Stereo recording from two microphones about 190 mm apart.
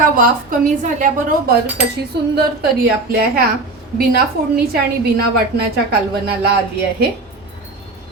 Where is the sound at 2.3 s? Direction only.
60° right (ahead or behind).